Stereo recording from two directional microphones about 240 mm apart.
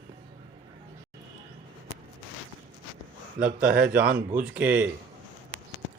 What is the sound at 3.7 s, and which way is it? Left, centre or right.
Speech, centre.